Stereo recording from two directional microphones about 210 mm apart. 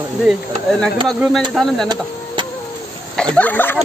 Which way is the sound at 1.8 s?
20° right (ahead or behind).